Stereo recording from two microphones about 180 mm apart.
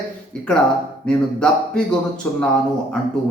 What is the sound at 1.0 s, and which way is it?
Speech, 5° left (ahead or behind).